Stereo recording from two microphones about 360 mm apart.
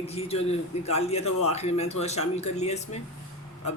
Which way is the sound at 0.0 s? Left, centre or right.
Centre.